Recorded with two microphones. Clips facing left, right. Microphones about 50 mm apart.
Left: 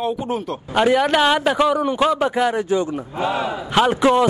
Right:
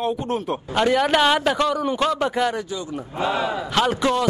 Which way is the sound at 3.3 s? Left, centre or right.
Centre.